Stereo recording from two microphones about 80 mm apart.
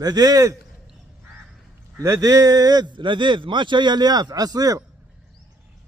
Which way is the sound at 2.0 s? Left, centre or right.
Right.